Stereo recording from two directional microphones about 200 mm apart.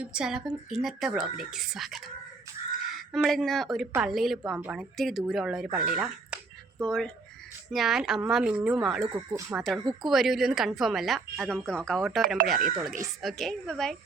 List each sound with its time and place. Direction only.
0.0 s a woman's voice: 5° right (ahead or behind)
5.7 s a sound: 5° right (ahead or behind)
6.8 s a woman's voice: 5° left (ahead or behind)
9.0 s speech: 20° right (ahead or behind)
9.6 s a woman's voice: 5° right (ahead or behind)